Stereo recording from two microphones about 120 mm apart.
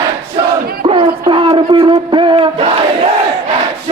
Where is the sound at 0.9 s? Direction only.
45° right (ahead or behind).